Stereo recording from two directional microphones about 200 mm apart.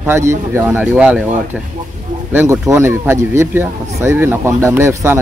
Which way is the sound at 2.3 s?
15° right (ahead or behind).